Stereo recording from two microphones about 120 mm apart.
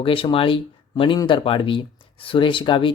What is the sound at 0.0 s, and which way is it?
Speech, 50° left (ahead or behind).